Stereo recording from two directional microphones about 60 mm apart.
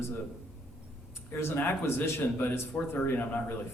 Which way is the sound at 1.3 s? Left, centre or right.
Left.